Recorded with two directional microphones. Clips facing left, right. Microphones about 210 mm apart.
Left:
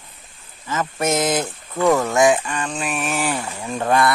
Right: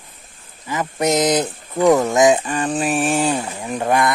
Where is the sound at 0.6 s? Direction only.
15° right (ahead or behind).